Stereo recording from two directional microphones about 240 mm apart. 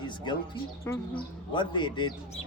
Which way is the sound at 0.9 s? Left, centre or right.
Centre.